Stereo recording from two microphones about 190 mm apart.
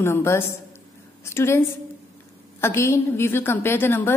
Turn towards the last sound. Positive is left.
turn(degrees=10)  # may be behind; listen again after turning